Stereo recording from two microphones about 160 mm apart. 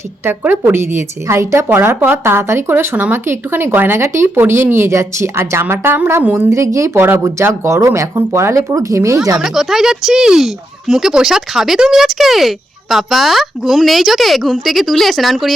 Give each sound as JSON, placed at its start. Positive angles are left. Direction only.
{"t": 0.3, "sound": "a woman's voice", "side_deg": -15}
{"t": 9.4, "sound": "speech", "side_deg": -5}